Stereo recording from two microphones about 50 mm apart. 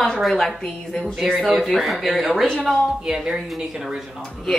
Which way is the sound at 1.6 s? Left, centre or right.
Centre.